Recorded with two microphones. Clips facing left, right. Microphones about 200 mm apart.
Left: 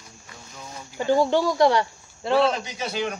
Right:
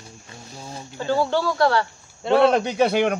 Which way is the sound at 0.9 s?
15° left (ahead or behind).